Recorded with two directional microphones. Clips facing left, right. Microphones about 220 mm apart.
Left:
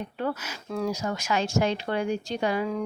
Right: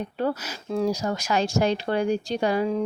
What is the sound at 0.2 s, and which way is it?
Speech, 35° right (ahead or behind).